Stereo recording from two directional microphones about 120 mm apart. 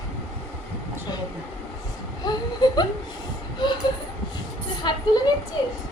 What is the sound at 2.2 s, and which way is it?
Speech, 35° left (ahead or behind).